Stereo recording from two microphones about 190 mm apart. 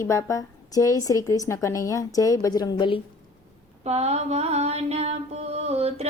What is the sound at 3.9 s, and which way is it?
Mantra, 35° right (ahead or behind).